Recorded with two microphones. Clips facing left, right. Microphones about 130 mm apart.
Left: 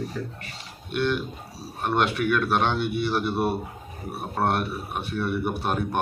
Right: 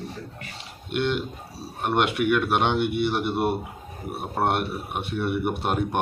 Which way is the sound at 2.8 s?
65° right (ahead or behind).